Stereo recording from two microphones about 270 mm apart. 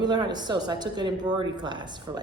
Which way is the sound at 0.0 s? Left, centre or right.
Centre.